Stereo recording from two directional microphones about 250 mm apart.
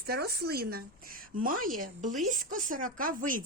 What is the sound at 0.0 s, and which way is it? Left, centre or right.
Speech, right.